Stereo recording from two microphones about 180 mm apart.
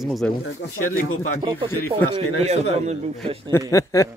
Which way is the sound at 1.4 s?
25° right (ahead or behind).